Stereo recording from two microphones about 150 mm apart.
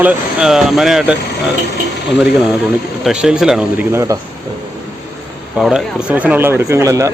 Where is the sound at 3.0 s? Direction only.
5° right (ahead or behind).